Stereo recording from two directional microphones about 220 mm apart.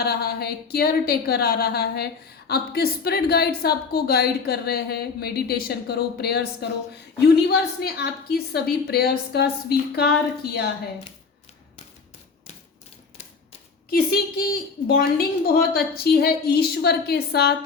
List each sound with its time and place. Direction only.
0.0 s a woman's voice: 45° left (ahead or behind)
13.9 s a woman's voice: 45° left (ahead or behind)